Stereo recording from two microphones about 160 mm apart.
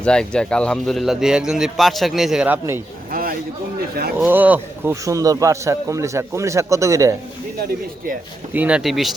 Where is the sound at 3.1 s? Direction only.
65° right (ahead or behind).